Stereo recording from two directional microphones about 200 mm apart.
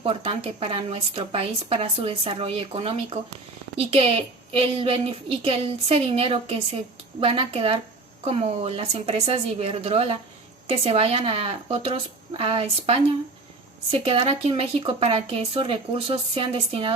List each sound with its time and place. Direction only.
0.0 s a woman's voice: 25° right (ahead or behind)